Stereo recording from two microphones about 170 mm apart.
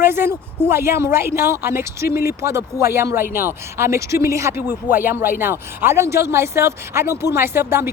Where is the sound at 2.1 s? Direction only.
65° left (ahead or behind).